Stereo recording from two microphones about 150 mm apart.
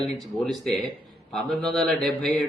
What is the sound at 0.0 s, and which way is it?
Speech, 5° left (ahead or behind).